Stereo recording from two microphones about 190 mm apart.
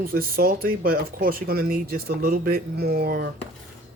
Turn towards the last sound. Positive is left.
turn(degrees=-55)  # may be behind; listen again after turning